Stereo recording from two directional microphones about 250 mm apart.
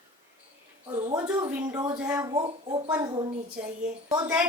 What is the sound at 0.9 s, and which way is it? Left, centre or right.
A woman's voice, centre.